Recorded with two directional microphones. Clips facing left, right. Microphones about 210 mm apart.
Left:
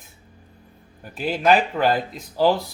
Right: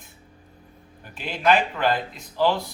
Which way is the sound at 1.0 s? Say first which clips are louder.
Left 3 dB; 40° left (ahead or behind).